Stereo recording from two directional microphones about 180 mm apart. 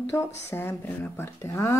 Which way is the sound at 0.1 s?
15° left (ahead or behind).